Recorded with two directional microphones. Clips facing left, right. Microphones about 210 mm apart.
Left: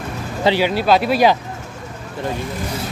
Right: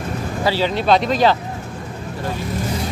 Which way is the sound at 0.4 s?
20° left (ahead or behind).